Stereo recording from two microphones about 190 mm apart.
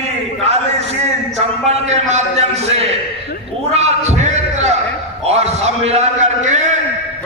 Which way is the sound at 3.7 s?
35° right (ahead or behind).